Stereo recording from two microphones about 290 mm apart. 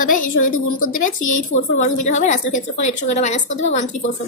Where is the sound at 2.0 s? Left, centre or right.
Left.